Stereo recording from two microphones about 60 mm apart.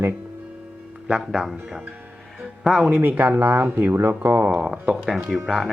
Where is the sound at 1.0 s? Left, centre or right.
Centre.